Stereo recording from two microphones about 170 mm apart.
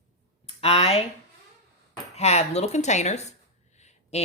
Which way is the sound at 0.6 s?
35° left (ahead or behind).